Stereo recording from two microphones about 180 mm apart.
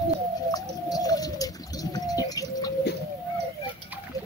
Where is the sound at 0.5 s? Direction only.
20° left (ahead or behind).